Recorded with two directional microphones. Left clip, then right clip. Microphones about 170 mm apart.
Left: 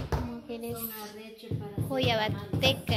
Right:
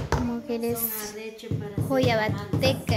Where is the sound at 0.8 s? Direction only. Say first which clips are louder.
Right 6 dB; 90° right.